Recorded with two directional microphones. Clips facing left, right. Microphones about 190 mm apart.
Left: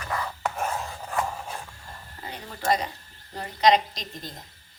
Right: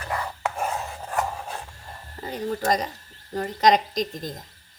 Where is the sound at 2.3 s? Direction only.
40° right (ahead or behind).